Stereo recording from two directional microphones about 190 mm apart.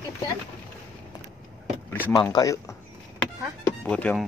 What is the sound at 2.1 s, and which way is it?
Speech, 20° left (ahead or behind).